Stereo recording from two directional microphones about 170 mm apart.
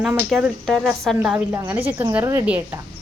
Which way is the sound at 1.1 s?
10° right (ahead or behind).